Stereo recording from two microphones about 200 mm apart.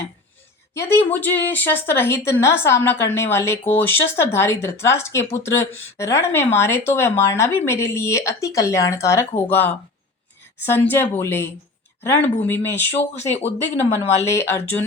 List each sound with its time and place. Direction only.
0.7 s speech: 10° left (ahead or behind)
13.1 s speech: 35° left (ahead or behind)
14.3 s speech: 10° left (ahead or behind)